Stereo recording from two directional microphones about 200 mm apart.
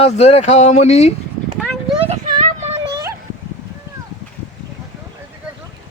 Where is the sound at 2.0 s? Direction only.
35° right (ahead or behind).